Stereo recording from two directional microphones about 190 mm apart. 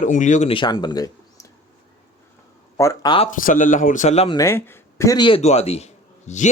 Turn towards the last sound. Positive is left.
turn(degrees=40)  # may be behind; listen again after turning